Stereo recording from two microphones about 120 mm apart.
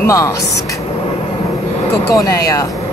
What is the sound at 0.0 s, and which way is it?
Speech, 25° left (ahead or behind).